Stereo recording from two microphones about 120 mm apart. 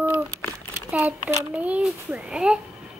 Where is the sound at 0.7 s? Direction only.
20° right (ahead or behind).